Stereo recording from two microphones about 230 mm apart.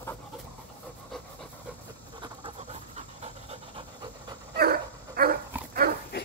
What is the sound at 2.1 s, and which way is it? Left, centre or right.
Pant, right.